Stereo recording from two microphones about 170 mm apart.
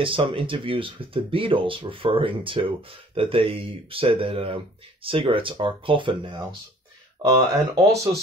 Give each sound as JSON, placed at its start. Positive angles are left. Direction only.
{"t": 0.0, "sound": "speech", "side_deg": -30}